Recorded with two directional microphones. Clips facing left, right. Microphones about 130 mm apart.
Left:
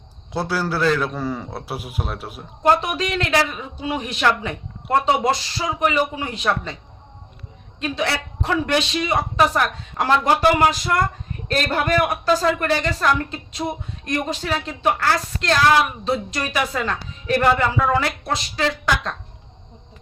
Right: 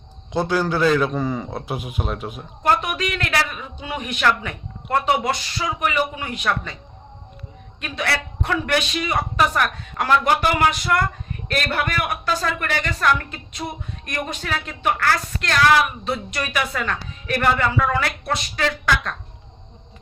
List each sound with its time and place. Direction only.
0.3 s a man's voice: 5° left (ahead or behind)
2.6 s a woman's voice: 30° left (ahead or behind)
7.8 s a woman's voice: 25° left (ahead or behind)